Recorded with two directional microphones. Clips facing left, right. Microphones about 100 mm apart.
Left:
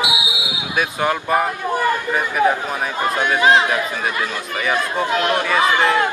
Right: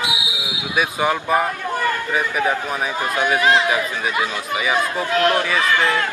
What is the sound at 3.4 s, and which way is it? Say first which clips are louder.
Speech: left 4 dB; 20° left (ahead or behind).